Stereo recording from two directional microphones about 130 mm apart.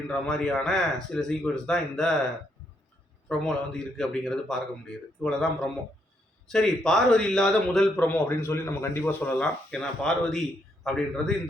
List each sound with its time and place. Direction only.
0.3 s speech: 5° left (ahead or behind)
3.2 s speech: 5° left (ahead or behind)